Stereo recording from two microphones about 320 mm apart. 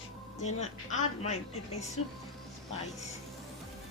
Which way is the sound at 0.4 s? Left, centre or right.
Left.